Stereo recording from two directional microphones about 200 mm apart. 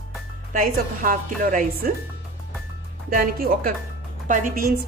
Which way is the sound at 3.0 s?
45° right (ahead or behind).